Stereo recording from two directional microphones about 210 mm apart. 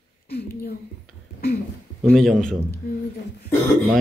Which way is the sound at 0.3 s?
50° left (ahead or behind).